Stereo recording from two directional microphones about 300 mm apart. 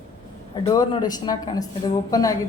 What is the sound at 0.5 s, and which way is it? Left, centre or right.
Speech, centre.